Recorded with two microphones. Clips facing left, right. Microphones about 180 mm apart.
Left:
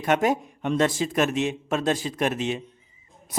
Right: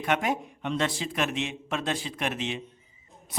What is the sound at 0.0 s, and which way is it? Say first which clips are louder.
A man's voice: left 5 dB; 40° left (ahead or behind).